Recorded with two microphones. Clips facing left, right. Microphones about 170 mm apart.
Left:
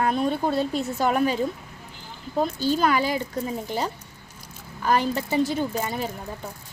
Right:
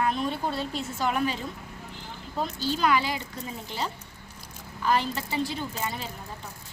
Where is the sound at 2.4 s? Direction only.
45° left (ahead or behind).